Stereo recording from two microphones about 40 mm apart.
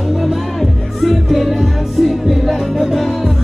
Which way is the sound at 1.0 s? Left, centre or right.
Centre.